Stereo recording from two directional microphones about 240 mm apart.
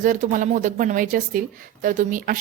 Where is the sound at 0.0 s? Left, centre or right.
Right.